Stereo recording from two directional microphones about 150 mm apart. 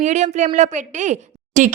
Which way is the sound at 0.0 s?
50° right (ahead or behind).